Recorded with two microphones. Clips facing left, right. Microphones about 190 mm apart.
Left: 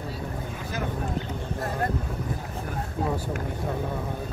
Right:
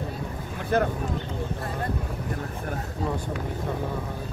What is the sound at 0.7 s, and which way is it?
Speech, 60° right (ahead or behind).